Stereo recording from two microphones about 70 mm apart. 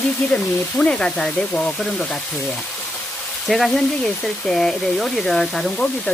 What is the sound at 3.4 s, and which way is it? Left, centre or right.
Speech, centre.